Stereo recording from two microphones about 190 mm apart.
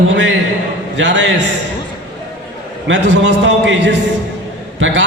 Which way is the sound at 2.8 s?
70° right (ahead or behind).